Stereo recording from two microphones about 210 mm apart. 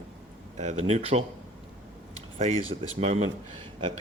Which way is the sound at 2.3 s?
30° right (ahead or behind).